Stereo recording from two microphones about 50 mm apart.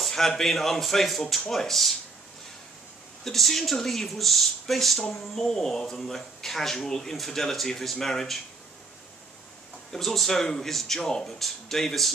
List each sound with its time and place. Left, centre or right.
0.0 s a sound: centre
0.4 s a man's voice: centre
3.3 s speech: centre
9.9 s speech: centre